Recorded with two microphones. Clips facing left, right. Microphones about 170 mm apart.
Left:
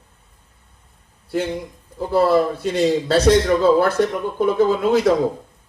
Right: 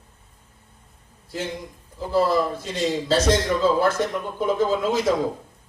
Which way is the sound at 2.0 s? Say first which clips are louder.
Left 4 dB; 65° left (ahead or behind).